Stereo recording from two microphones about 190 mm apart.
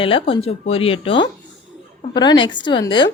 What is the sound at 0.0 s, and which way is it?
A woman's voice, 30° left (ahead or behind).